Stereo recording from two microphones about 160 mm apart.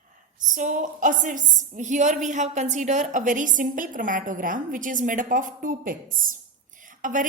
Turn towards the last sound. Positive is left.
turn(degrees=-55)  # may be behind; listen again after turning